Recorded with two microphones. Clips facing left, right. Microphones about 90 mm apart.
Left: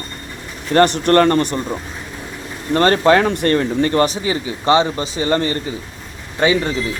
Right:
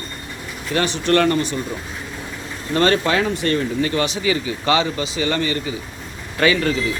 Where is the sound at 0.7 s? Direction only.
55° left (ahead or behind).